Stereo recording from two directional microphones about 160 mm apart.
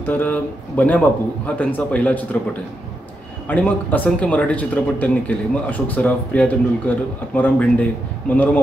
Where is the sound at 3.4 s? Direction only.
10° left (ahead or behind).